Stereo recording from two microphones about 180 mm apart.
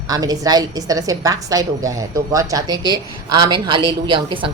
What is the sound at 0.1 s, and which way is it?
A woman's voice, 20° right (ahead or behind).